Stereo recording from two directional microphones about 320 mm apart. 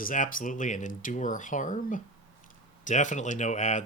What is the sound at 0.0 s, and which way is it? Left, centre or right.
Speech, left.